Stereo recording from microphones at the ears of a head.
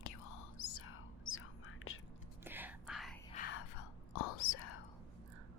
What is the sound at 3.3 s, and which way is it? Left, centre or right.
Whispering, left.